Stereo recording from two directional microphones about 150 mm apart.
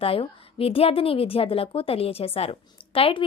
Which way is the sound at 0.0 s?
40° left (ahead or behind).